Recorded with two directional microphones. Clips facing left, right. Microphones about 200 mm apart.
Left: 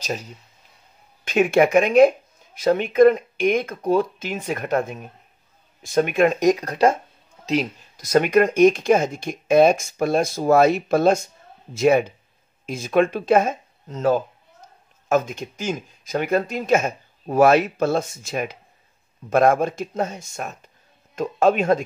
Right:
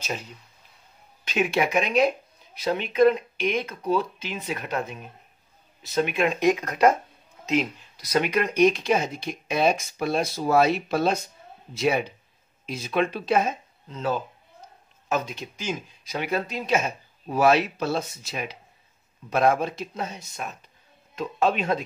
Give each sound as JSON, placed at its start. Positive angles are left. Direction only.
{"t": 1.2, "sound": "speech", "side_deg": 50}